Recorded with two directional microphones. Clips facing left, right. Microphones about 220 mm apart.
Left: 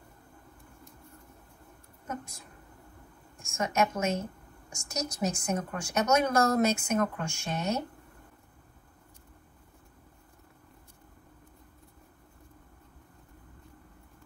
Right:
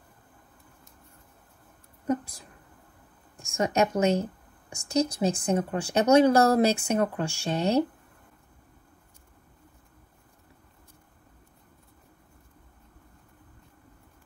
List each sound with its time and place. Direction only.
3.5 s speech: 35° right (ahead or behind)